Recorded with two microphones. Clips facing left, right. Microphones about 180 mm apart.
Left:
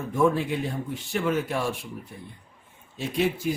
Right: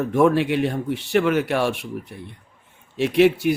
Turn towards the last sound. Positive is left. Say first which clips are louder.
# right 9 dB
turn(degrees=-75)  # may be behind; listen again after turning